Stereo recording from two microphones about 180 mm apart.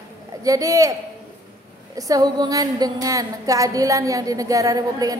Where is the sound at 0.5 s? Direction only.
20° right (ahead or behind).